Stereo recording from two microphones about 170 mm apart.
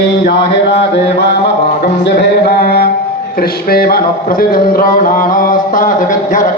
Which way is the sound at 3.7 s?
60° left (ahead or behind).